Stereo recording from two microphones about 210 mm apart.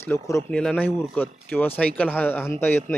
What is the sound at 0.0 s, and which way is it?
Speech, 15° left (ahead or behind).